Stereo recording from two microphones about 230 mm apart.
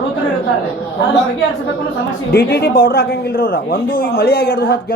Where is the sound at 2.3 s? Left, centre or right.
Left.